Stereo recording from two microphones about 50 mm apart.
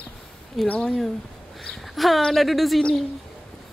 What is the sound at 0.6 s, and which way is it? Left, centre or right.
Speech, left.